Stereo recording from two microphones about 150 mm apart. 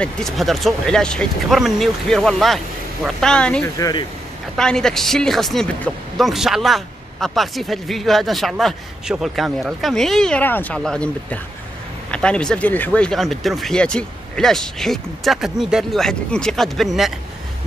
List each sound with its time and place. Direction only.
0.0 s a man's voice: centre (ahead or behind)
3.6 s speech: 25° left (ahead or behind)
4.6 s a man's voice: 5° left (ahead or behind)